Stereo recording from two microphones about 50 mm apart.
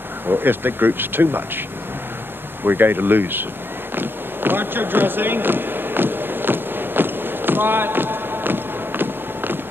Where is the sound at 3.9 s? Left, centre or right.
Right.